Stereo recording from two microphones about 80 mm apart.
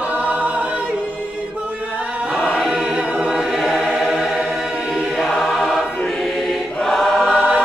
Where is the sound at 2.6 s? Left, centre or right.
Centre.